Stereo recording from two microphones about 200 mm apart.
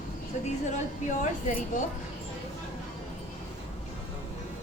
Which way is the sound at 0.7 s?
40° left (ahead or behind).